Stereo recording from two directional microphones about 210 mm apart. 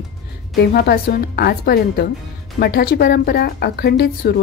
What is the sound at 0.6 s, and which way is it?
Speech, 50° left (ahead or behind).